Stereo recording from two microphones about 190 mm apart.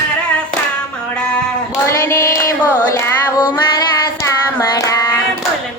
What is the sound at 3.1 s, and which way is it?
Child singing, 20° left (ahead or behind).